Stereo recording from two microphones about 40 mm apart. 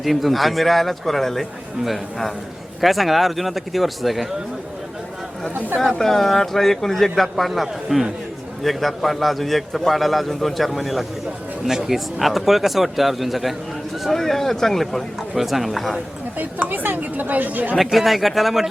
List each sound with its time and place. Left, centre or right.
0.0 s speech: centre
6.0 s a man's voice: centre
14.1 s a man's voice: centre
15.4 s speech: centre
16.4 s speech: right
17.7 s speech: centre